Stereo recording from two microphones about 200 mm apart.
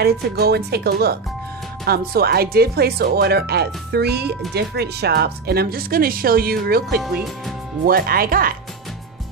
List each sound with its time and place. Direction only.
0.0 s speech: 55° right (ahead or behind)
7.0 s speech: centre (ahead or behind)
7.8 s speech: 50° right (ahead or behind)